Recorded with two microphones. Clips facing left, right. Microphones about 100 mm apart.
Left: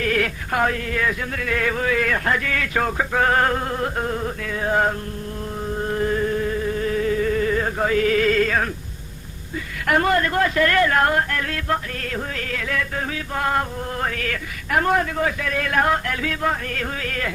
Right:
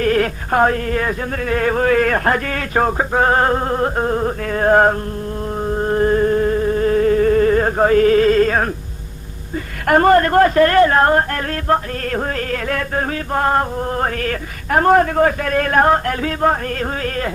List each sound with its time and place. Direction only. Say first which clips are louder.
0.0 s a woman's voice: right 6 dB; 40° right (ahead or behind)
5.6 s insect: right 7 dB; 40° right (ahead or behind)
9.8 s a woman's voice: right 7 dB; 45° right (ahead or behind)